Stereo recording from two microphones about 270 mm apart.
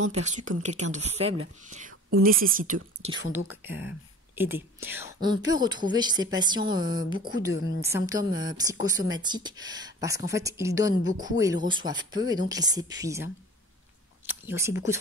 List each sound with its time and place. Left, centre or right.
0.2 s speech: right
1.7 s whispering: right
2.5 s speech: right
3.1 s speech: centre
7.5 s a woman's voice: left
7.8 s speech: centre
14.2 s a sound: centre